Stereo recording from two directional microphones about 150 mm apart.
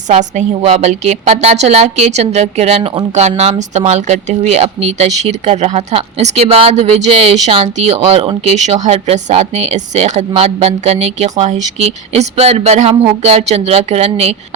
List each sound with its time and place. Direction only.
0.1 s a woman's voice: 50° right (ahead or behind)